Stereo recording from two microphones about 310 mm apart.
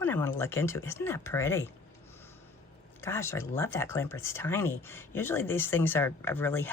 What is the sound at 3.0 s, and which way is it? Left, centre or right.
Speech, centre.